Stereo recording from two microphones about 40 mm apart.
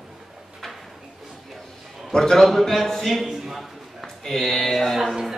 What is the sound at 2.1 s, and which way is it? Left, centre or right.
A man's voice, centre.